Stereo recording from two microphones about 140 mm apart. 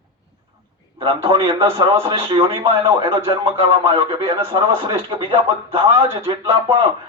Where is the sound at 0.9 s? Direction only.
35° right (ahead or behind).